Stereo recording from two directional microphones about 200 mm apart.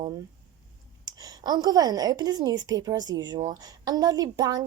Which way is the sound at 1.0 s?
20° right (ahead or behind).